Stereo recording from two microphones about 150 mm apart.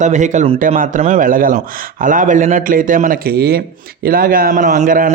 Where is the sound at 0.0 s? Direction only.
55° right (ahead or behind); by 3.6 s 90° right.